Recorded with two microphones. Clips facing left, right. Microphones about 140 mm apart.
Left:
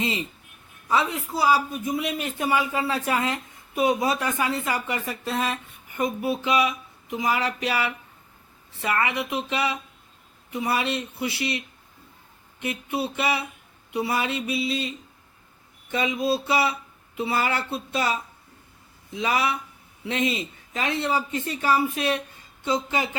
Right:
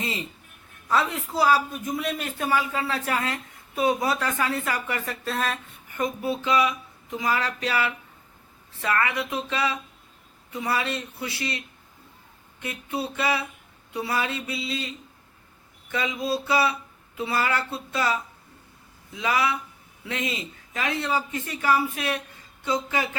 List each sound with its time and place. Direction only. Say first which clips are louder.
0.9 s a man's voice: left 1 dB; 10° left (ahead or behind)
12.5 s a man's voice: left 3 dB; 15° left (ahead or behind)
15.9 s speech: left 3 dB; 20° left (ahead or behind)